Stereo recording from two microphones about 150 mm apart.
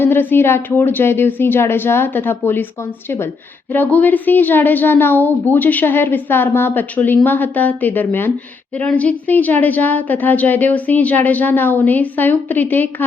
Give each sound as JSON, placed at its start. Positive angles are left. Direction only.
{"t": 0.0, "sound": "a woman's voice", "side_deg": 15}
{"t": 3.7, "sound": "a woman's voice", "side_deg": 10}